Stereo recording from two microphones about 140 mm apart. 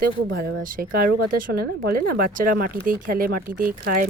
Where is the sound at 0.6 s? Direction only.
85° right.